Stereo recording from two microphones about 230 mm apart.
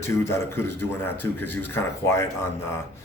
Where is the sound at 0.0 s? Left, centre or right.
Centre.